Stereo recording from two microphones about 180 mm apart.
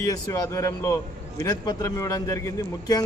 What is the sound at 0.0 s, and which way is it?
A man's voice, 20° left (ahead or behind).